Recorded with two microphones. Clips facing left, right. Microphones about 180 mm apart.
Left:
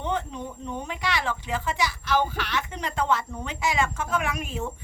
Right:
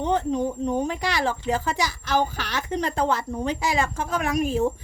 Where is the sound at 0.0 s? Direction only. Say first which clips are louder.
Right 7 dB; 40° right (ahead or behind).